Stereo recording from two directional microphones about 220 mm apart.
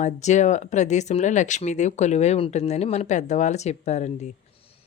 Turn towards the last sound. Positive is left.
turn(degrees=30)  # may be behind; listen again after turning